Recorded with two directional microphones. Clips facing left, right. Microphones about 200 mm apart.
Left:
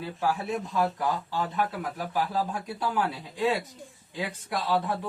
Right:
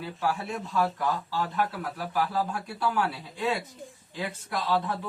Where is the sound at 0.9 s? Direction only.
15° left (ahead or behind).